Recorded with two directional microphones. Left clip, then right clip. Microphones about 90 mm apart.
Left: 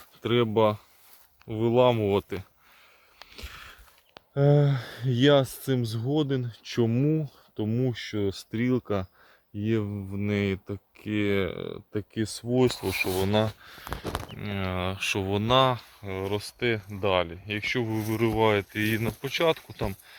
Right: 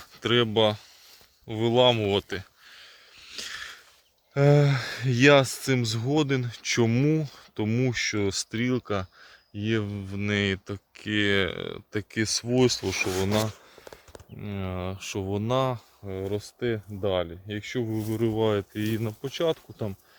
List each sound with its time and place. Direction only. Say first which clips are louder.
0.3 s speech: even; 5° left (ahead or behind)
3.3 s a sound: right 8 dB; centre (ahead or behind)
4.4 s speech: right 2 dB; 40° right (ahead or behind)
8.4 s speech: even; 20° left (ahead or behind)
9.6 s speech: even; 15° left (ahead or behind); by 12.0 s 10° right (ahead or behind)
12.2 s speech: right 6 dB; 35° right (ahead or behind)
12.5 s speech: even; 90° right
13.1 s speech: left 2 dB; 35° right (ahead or behind)
13.4 s a sound: left 2 dB; 25° right (ahead or behind)
14.4 s speech: left 2 dB; 10° right (ahead or behind)
16.3 s speech: left 2 dB; 40° right (ahead or behind)
17.8 s speech: left 1 dB; 5° right (ahead or behind)
18.1 s speech: left 2 dB; 40° right (ahead or behind)